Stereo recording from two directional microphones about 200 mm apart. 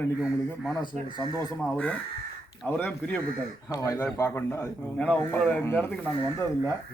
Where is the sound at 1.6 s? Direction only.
5° left (ahead or behind).